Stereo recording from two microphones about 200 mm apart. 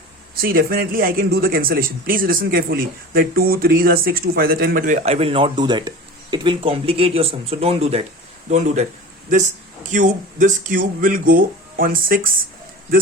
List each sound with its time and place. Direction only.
0.4 s speech: 50° right (ahead or behind)
5.0 s speech: 30° right (ahead or behind)
9.9 s speech: 40° right (ahead or behind)